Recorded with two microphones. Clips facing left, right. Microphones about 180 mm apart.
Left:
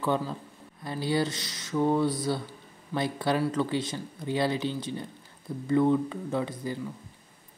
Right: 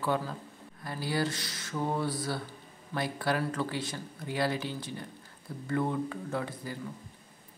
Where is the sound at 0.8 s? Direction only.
25° left (ahead or behind).